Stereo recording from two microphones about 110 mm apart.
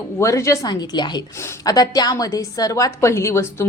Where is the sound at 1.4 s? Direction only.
30° left (ahead or behind).